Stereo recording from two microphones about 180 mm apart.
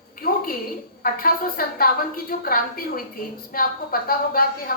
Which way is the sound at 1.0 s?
55° left (ahead or behind).